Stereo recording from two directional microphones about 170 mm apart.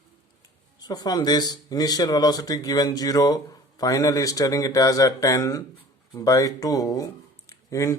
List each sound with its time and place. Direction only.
0.8 s speech: 20° left (ahead or behind)